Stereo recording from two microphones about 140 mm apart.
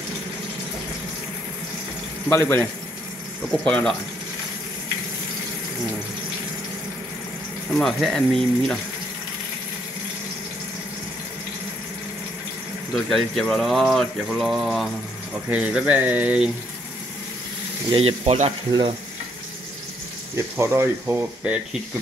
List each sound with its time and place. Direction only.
2.2 s speech: 15° left (ahead or behind)
3.6 s speech: 5° left (ahead or behind)
7.7 s speech: centre (ahead or behind)
12.9 s speech: centre (ahead or behind)
17.8 s speech: 40° right (ahead or behind)
18.7 s frying: 35° right (ahead or behind)
20.5 s speech: 20° right (ahead or behind)